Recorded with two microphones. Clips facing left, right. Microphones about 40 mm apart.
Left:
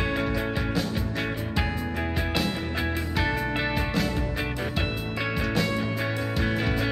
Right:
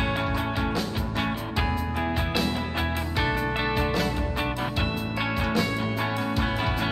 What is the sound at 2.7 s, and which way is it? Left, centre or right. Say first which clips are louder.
Music: even; centre.